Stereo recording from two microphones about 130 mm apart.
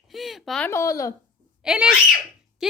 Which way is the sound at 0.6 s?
20° left (ahead or behind).